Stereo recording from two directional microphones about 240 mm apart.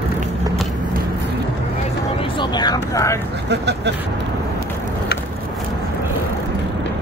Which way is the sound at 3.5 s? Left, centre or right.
Right.